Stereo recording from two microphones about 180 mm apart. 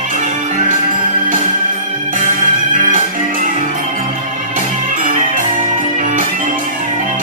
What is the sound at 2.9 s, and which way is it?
Music, 45° right (ahead or behind).